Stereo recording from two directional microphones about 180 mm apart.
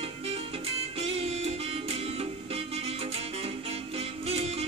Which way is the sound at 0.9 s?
30° right (ahead or behind).